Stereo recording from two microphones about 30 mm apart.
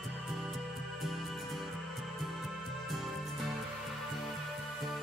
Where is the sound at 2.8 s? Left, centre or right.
Centre.